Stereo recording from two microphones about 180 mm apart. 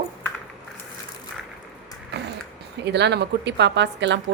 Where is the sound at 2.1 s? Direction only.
65° right (ahead or behind).